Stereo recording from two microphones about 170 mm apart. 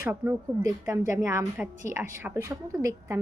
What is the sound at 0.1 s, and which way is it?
A woman's voice, 15° right (ahead or behind).